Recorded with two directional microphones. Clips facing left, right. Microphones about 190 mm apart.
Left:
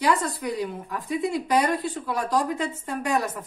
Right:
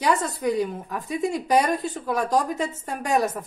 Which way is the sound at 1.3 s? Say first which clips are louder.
Right 2 dB; 45° right (ahead or behind).